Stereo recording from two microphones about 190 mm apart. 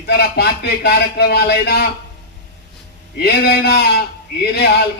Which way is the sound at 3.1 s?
60° left (ahead or behind).